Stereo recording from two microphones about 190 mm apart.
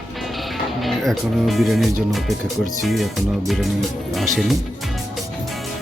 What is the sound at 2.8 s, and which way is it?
Speech, centre (ahead or behind).